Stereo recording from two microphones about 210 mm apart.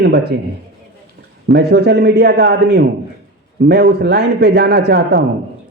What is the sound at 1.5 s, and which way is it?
A man's voice, 50° right (ahead or behind).